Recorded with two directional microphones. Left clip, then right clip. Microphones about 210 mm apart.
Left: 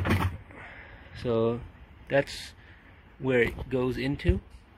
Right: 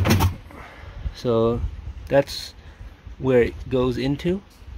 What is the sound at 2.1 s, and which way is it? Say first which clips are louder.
Speech: right 7 dB; 10° right (ahead or behind).